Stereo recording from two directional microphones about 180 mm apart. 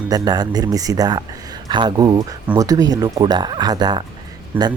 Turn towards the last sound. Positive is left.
turn(degrees=-10)  # may be behind; listen again after turning